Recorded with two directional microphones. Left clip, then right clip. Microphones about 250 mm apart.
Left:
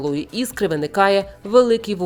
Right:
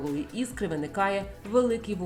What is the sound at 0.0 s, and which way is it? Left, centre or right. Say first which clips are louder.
A woman's voice: left 9 dB; left.